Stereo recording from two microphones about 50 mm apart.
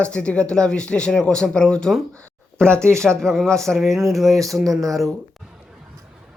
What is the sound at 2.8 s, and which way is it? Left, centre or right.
Speech, right.